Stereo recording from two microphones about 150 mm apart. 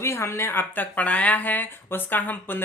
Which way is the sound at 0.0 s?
20° left (ahead or behind).